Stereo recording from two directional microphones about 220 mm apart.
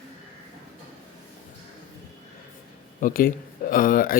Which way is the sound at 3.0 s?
40° left (ahead or behind).